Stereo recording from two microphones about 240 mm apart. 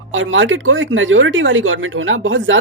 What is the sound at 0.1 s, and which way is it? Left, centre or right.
Speech, right.